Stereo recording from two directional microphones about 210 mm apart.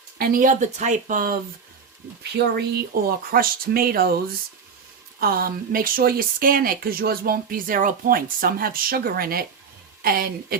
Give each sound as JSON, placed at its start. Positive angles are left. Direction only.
{"t": 0.2, "sound": "speech", "side_deg": -40}
{"t": 2.6, "sound": "speech", "side_deg": -45}